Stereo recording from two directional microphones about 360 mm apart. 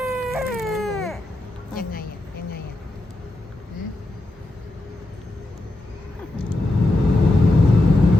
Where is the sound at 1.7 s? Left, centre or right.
Left.